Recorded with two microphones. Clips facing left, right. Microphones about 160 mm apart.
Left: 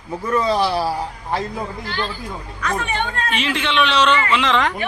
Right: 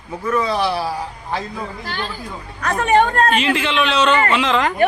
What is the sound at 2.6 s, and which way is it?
Speech, 40° right (ahead or behind).